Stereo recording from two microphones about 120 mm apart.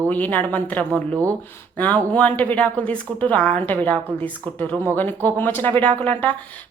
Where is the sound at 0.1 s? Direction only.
15° left (ahead or behind).